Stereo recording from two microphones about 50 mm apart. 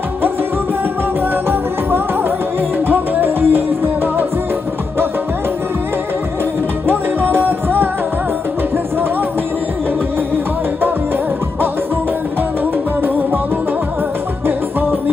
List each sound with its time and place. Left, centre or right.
2.9 s music: right
6.9 s music: right